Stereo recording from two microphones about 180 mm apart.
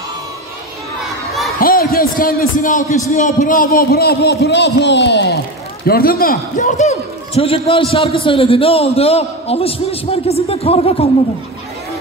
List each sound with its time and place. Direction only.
1.0 s children playing: centre (ahead or behind)
1.6 s a man's voice: 55° left (ahead or behind); by 5.4 s 70° left (ahead or behind)
5.9 s a man's voice: 55° left (ahead or behind); by 11.1 s 35° left (ahead or behind)